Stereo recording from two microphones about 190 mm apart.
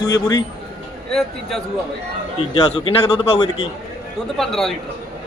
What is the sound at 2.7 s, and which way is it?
Speech, 25° left (ahead or behind).